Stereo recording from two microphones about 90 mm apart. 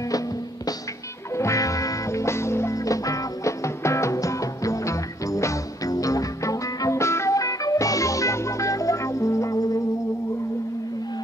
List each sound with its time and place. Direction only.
1.3 s music: 35° left (ahead or behind)